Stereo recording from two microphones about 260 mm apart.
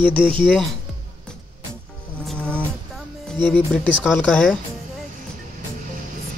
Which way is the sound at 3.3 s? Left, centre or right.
Centre.